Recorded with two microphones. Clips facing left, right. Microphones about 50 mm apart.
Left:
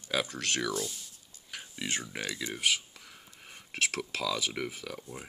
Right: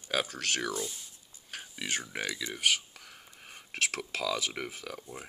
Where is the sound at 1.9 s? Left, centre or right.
Right.